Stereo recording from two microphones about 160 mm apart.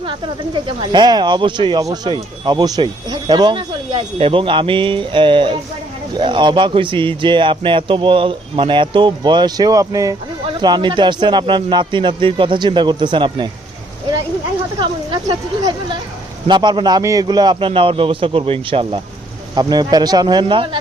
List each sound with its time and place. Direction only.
0.0 s speech: 30° right (ahead or behind)
14.8 s speech: 30° right (ahead or behind)